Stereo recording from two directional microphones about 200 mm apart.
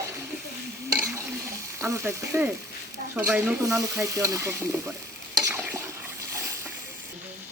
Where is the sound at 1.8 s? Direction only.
15° right (ahead or behind).